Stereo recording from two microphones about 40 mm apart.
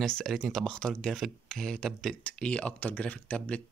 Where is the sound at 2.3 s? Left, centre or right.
Left.